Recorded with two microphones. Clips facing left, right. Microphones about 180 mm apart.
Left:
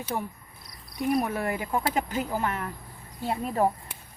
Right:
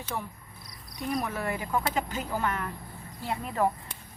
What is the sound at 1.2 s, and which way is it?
Speech, 45° left (ahead or behind).